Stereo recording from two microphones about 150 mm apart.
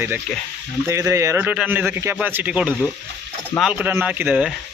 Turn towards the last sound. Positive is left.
turn(degrees=-10)  # may be behind; listen again after turning